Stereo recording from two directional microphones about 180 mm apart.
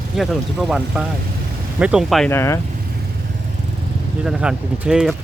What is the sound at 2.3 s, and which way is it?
Speech, 15° left (ahead or behind).